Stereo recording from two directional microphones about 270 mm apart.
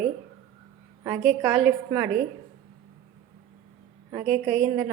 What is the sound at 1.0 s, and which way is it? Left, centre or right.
A woman's voice, centre.